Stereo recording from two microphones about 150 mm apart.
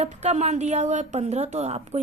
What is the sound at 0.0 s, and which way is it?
A woman's voice, 45° right (ahead or behind).